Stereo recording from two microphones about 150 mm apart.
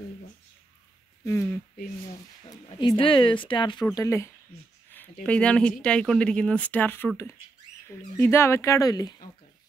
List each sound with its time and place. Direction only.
1.2 s speech: 15° left (ahead or behind)
2.5 s speech: 30° left (ahead or behind)
3.9 s speech: 20° left (ahead or behind)
5.2 s speech: 10° left (ahead or behind); by 9.1 s 25° left (ahead or behind)